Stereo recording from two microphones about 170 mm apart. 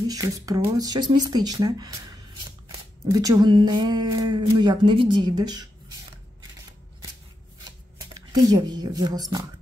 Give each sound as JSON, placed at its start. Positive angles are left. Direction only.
{"t": 0.1, "sound": "speech", "side_deg": -20}
{"t": 3.1, "sound": "speech", "side_deg": -20}
{"t": 8.0, "sound": "speech", "side_deg": -20}